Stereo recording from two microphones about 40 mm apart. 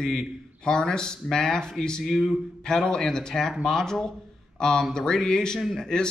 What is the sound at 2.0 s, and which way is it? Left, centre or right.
Speech, centre.